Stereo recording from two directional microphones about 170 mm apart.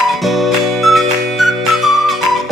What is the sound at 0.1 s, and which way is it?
Music, centre (ahead or behind).